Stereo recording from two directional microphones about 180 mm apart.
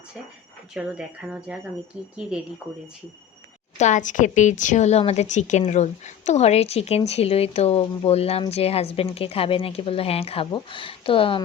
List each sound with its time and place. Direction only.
0.7 s speech: 5° right (ahead or behind)
3.8 s a woman's voice: 40° left (ahead or behind)